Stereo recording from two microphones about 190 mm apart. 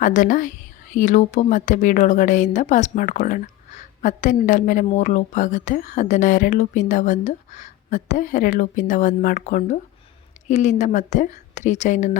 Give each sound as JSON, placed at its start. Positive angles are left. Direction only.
{"t": 0.0, "sound": "a woman's voice", "side_deg": 45}